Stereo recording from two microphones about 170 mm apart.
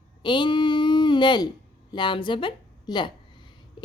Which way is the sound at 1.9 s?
25° left (ahead or behind).